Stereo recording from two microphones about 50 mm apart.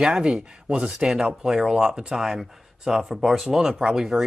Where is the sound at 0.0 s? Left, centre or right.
Centre.